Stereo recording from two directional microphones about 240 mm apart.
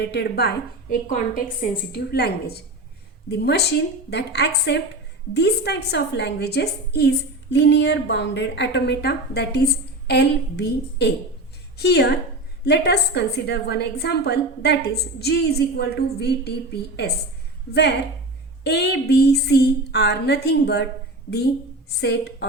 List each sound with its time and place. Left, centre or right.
0.0 s a woman's voice: left
22.0 s a woman's voice: left